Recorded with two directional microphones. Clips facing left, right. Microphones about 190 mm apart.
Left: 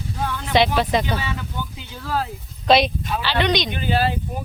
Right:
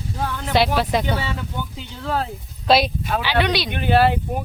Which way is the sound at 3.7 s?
60° right (ahead or behind).